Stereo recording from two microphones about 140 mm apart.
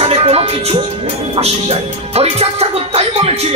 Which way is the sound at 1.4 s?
50° right (ahead or behind).